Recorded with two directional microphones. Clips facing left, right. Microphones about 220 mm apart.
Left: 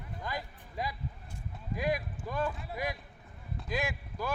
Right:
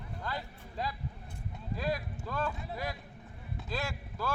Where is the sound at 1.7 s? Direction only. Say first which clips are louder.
Left 2 dB; 15° left (ahead or behind).